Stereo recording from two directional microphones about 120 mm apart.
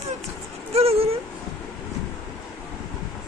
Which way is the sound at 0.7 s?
55° right (ahead or behind).